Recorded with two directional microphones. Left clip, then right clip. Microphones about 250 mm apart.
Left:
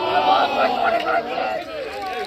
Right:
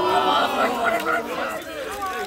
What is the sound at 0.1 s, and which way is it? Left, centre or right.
Chatter, right.